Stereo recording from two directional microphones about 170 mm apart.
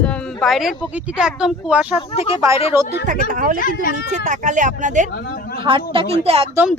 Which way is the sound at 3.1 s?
50° right (ahead or behind).